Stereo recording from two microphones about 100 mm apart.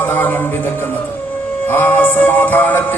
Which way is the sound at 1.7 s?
20° left (ahead or behind).